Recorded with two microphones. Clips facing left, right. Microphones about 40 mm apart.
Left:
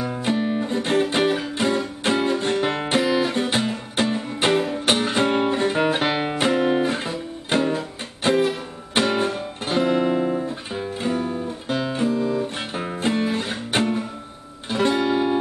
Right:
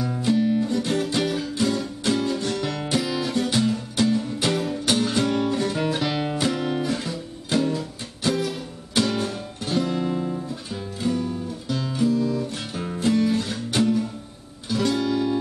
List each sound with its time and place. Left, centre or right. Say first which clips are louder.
0.0 s music: right 1 dB; left